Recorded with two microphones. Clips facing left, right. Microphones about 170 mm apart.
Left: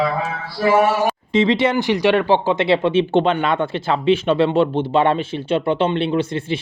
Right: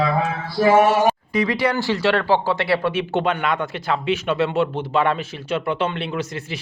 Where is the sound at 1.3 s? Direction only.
25° left (ahead or behind).